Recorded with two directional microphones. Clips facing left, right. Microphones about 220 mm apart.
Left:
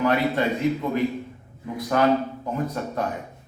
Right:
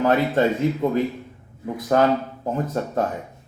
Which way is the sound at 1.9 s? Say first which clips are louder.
Right 3 dB; 35° right (ahead or behind).